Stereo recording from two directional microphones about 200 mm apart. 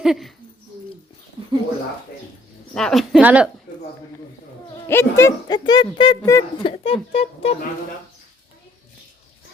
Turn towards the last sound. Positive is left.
turn(degrees=30)  # may be behind; listen again after turning